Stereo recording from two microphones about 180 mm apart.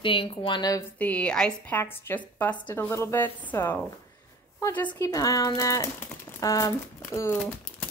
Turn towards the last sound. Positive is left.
turn(degrees=15)  # may be behind; listen again after turning